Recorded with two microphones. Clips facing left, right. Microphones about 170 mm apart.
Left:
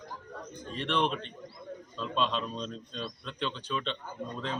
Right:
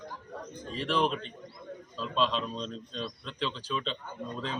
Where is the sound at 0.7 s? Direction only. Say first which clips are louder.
Right 1 dB; centre (ahead or behind).